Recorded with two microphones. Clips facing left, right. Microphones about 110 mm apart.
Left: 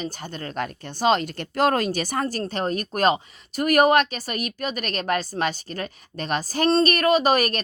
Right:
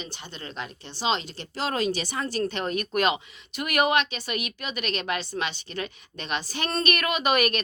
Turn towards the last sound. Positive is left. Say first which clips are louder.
# left 4 dB
turn(degrees=35)  # may be behind; listen again after turning